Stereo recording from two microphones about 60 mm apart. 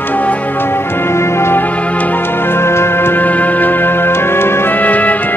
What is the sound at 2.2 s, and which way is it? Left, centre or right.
Music, left.